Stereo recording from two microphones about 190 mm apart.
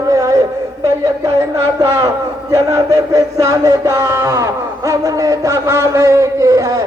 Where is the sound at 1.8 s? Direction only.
20° right (ahead or behind).